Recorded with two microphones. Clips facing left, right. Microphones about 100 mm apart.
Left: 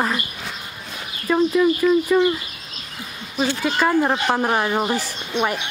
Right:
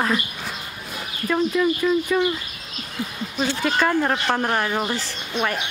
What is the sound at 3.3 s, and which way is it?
Speech, 5° left (ahead or behind).